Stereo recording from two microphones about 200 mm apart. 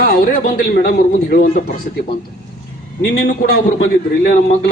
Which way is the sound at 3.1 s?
50° left (ahead or behind).